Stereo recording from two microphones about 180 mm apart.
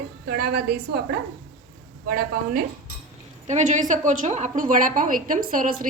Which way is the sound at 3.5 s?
40° right (ahead or behind).